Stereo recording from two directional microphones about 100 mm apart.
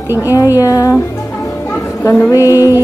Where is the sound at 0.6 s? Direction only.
35° left (ahead or behind).